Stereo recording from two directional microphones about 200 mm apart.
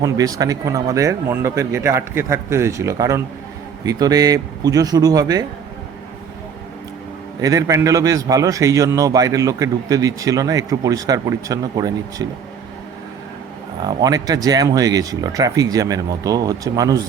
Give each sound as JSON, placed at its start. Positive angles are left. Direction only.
{"t": 0.0, "sound": "a man's voice", "side_deg": -15}
{"t": 7.4, "sound": "a man's voice", "side_deg": -15}
{"t": 13.8, "sound": "a man's voice", "side_deg": -20}